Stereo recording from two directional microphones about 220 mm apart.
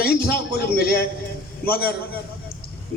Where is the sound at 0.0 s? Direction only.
45° left (ahead or behind).